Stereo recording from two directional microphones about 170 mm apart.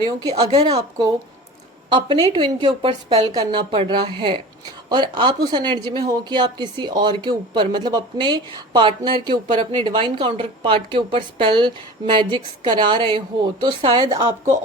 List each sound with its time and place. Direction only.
0.0 s speech: 25° right (ahead or behind)
1.9 s speech: 30° right (ahead or behind)